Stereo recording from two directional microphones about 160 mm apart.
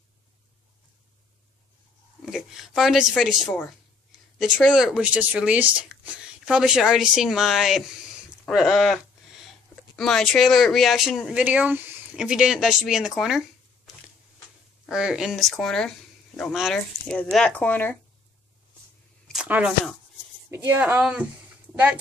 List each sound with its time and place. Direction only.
2.2 s speech: centre (ahead or behind)
8.5 s a sound: centre (ahead or behind)
9.9 s speech: centre (ahead or behind)
14.9 s speech: 5° right (ahead or behind); by 17.9 s 10° left (ahead or behind)
19.4 s speech: 10° right (ahead or behind)